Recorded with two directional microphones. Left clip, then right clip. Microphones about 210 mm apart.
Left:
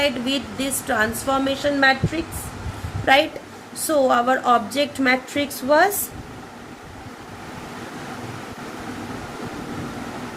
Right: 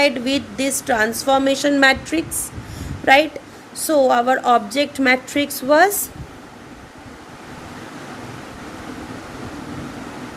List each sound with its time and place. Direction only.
0.0 s a woman's voice: 40° right (ahead or behind)
3.1 s a woman's voice: 40° right (ahead or behind)